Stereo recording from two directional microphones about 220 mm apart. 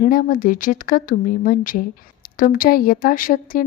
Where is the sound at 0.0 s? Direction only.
40° left (ahead or behind).